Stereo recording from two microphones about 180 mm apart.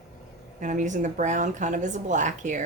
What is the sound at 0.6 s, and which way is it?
A woman's voice, 45° right (ahead or behind).